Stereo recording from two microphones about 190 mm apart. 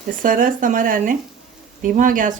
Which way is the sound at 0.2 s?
45° right (ahead or behind).